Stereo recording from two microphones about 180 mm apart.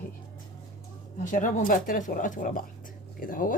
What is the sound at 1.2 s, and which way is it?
Speech, 45° left (ahead or behind).